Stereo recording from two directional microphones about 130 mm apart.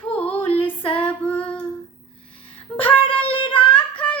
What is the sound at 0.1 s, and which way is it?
Music, 10° left (ahead or behind).